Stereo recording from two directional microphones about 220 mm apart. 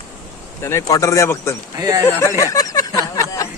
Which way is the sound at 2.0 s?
10° left (ahead or behind).